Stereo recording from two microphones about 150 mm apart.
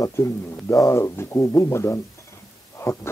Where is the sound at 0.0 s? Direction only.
20° left (ahead or behind).